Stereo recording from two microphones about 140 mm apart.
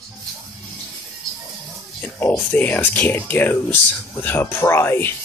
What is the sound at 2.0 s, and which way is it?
Speech, 10° left (ahead or behind).